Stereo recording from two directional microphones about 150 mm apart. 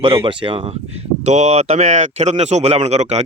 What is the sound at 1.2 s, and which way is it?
Speech, 50° right (ahead or behind).